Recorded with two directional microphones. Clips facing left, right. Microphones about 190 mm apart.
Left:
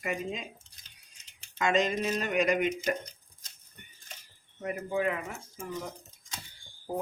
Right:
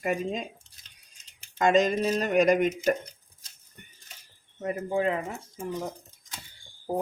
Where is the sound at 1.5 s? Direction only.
40° right (ahead or behind).